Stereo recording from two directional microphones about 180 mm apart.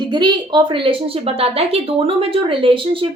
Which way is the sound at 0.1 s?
25° right (ahead or behind).